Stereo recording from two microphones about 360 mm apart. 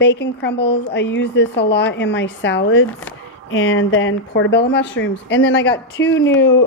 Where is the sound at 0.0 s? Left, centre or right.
Left.